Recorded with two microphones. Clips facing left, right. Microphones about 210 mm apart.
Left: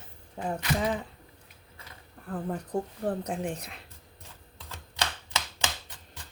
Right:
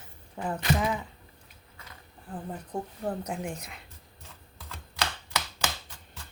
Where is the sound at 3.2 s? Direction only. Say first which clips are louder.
Left 2 dB; 35° left (ahead or behind).